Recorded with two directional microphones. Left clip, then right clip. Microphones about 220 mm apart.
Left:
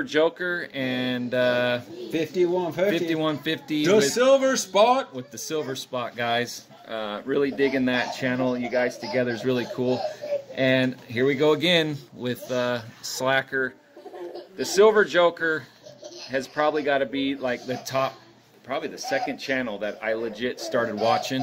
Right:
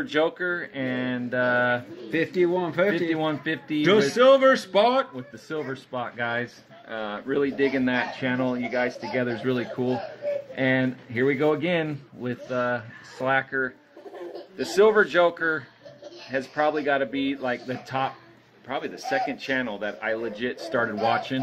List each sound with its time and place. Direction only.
0.0 s speech: 20° left (ahead or behind)
2.0 s a man's voice: 20° right (ahead or behind)
3.1 s speech: 25° left (ahead or behind)
3.8 s speech: 15° right (ahead or behind)
5.1 s speech: 30° left (ahead or behind)